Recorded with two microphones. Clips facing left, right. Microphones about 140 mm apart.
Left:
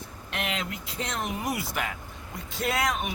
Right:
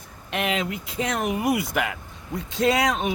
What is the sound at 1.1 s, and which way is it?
Speech, 60° right (ahead or behind).